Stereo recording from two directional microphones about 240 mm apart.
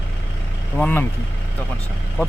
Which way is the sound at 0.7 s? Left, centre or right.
Centre.